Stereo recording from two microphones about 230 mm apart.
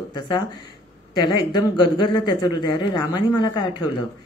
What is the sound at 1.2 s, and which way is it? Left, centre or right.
Speech, centre.